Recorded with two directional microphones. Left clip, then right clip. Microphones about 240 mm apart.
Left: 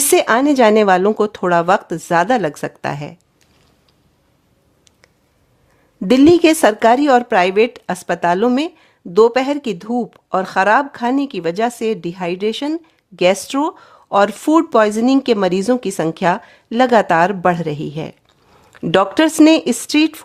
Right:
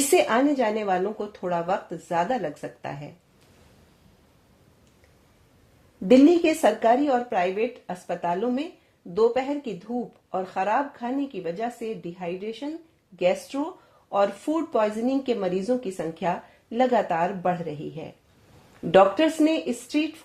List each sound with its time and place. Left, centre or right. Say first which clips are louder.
0.1 s speech: left 8 dB; left
6.1 s speech: left 7 dB; left